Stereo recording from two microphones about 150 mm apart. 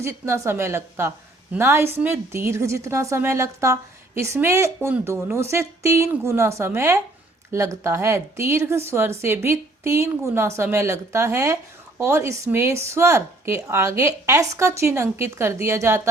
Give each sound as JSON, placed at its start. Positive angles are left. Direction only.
{"t": 0.0, "sound": "speech", "side_deg": -20}